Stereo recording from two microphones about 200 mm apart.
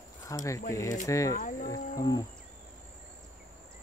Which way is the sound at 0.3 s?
15° left (ahead or behind).